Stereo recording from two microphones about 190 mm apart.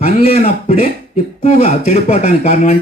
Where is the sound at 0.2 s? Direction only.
30° left (ahead or behind).